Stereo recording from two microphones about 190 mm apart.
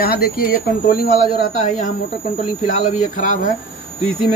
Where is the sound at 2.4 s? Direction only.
40° left (ahead or behind).